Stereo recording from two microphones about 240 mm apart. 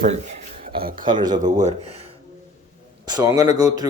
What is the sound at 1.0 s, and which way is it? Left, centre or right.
Speech, centre.